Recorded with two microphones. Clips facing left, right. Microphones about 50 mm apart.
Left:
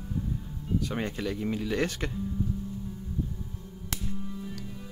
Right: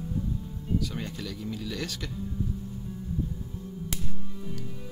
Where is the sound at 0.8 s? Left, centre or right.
Left.